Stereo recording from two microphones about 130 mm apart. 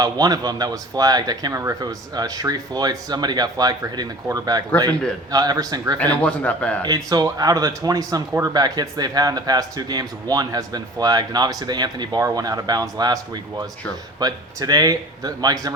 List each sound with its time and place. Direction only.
0.0 s speech: 30° right (ahead or behind)
6.0 s a man's voice: 10° left (ahead or behind)
6.8 s speech: 30° right (ahead or behind)